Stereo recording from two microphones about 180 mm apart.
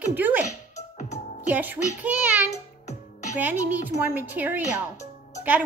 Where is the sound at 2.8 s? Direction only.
40° left (ahead or behind).